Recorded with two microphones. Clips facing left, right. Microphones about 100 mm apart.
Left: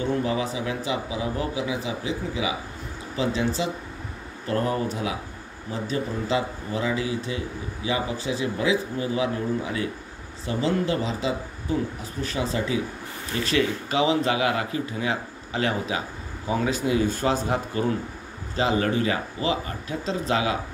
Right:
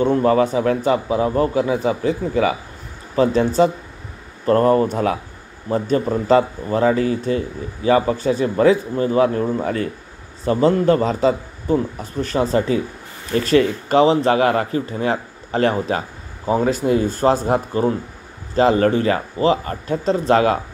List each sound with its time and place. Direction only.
0.0 s speech: 50° right (ahead or behind)